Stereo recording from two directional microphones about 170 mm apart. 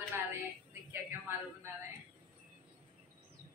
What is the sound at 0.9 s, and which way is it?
Speech, 15° right (ahead or behind).